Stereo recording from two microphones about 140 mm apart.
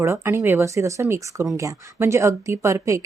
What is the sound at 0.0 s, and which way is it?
A woman's voice, 20° right (ahead or behind).